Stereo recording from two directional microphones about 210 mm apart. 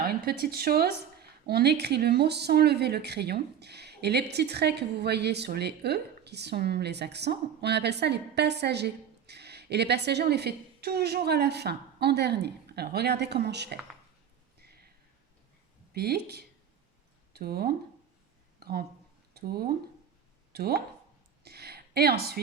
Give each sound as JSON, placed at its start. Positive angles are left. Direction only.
{"t": 0.0, "sound": "speech", "side_deg": -45}
{"t": 15.9, "sound": "speech", "side_deg": -50}
{"t": 21.4, "sound": "a sound", "side_deg": -50}